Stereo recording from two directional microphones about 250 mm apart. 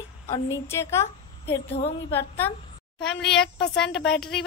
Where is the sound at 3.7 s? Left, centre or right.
Centre.